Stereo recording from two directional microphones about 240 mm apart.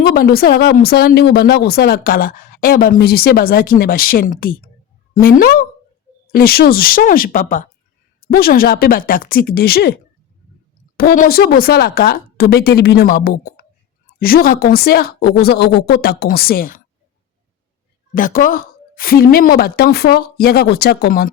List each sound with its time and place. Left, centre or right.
0.0 s speech: left
10.9 s speech: left
18.1 s speech: left